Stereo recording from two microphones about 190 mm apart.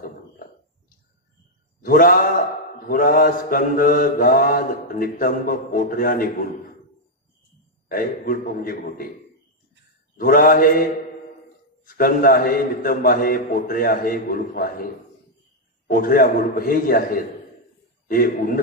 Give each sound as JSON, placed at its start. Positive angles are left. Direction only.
{"t": 0.0, "sound": "a sound", "side_deg": 50}
{"t": 1.8, "sound": "a man's voice", "side_deg": 50}
{"t": 2.9, "sound": "mantra", "side_deg": 50}
{"t": 7.9, "sound": "mantra", "side_deg": 50}
{"t": 10.1, "sound": "mantra", "side_deg": 50}
{"t": 15.9, "sound": "mantra", "side_deg": 50}